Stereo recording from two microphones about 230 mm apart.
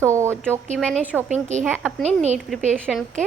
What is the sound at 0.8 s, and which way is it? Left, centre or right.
Speech, centre.